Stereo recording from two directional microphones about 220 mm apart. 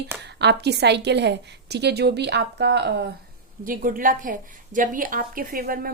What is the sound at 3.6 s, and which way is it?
A woman's voice, 40° right (ahead or behind).